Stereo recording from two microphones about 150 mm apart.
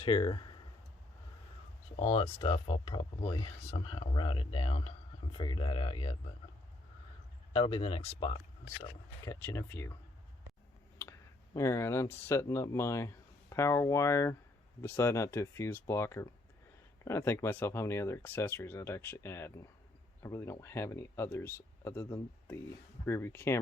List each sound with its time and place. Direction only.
0.0 s speech: 30° left (ahead or behind)
2.0 s speech: 40° left (ahead or behind)
7.5 s speech: 40° left (ahead or behind)
9.2 s speech: 20° left (ahead or behind)
11.5 s speech: 20° left (ahead or behind)